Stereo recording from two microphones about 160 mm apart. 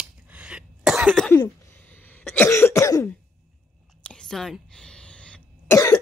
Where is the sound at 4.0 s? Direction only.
5° left (ahead or behind).